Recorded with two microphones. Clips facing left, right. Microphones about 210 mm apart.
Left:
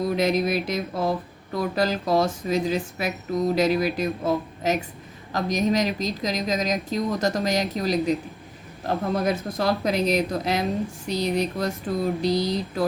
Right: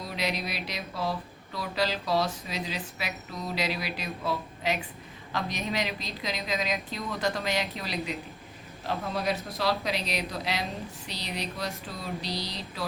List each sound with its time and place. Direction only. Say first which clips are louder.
0.0 s a woman's voice: left 11 dB; 50° left (ahead or behind)